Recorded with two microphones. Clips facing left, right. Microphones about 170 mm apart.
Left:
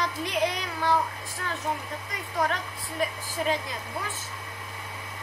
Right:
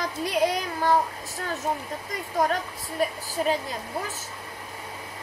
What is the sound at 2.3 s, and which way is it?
Speech, 40° right (ahead or behind).